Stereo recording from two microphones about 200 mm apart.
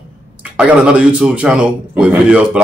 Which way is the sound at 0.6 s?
5° right (ahead or behind).